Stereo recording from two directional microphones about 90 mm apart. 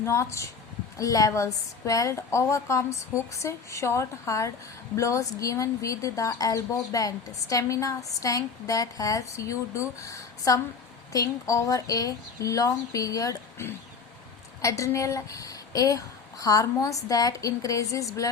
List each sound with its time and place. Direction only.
0.0 s speech: 30° left (ahead or behind)
13.6 s speech: 30° left (ahead or behind)